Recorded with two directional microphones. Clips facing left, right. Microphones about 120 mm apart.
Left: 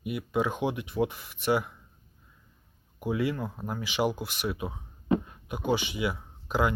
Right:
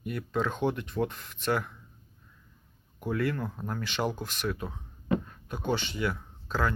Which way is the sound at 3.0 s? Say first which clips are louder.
Left 1 dB; 10° left (ahead or behind).